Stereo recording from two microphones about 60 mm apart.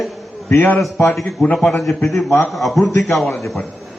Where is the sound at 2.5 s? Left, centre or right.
Centre.